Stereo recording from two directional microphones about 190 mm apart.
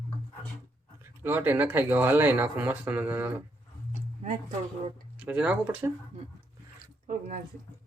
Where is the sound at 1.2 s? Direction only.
10° right (ahead or behind).